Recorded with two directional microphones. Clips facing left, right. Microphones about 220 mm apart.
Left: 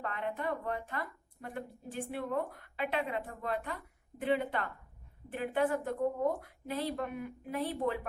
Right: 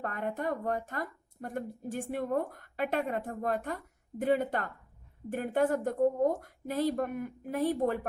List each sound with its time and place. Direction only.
0.0 s speech: 45° right (ahead or behind)